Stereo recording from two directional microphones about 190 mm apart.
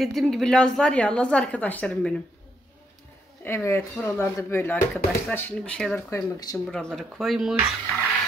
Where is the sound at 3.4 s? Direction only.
15° left (ahead or behind).